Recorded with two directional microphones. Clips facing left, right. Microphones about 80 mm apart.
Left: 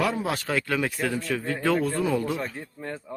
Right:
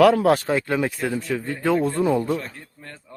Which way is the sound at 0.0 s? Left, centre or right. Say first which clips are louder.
Right 11 dB; right.